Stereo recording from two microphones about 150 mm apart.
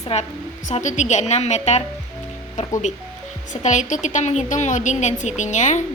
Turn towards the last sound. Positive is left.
turn(degrees=55)  # may be behind; listen again after turning